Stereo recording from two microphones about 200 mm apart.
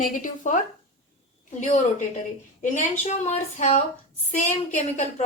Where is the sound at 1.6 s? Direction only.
35° left (ahead or behind).